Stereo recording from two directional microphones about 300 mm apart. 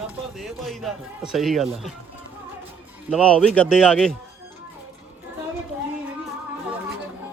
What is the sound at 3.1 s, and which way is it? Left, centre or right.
A man's voice, centre.